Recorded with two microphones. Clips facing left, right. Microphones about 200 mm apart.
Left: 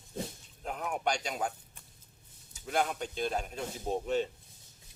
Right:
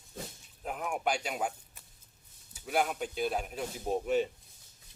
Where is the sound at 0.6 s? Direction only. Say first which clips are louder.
Even; 5° right (ahead or behind).